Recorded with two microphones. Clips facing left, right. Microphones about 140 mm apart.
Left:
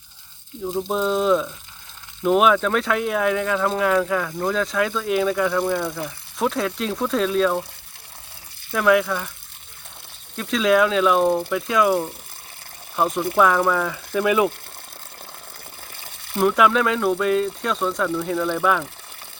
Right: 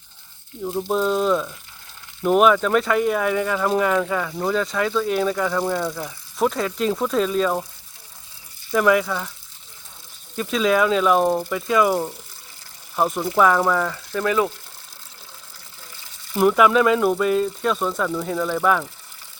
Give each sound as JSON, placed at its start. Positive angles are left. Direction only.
{"t": 0.8, "sound": "speech", "side_deg": 0}
{"t": 8.7, "sound": "speech", "side_deg": 0}
{"t": 10.3, "sound": "speech", "side_deg": 0}
{"t": 14.1, "sound": "speech", "side_deg": 15}
{"t": 16.0, "sound": "a sound", "side_deg": 60}
{"t": 16.4, "sound": "speech", "side_deg": -5}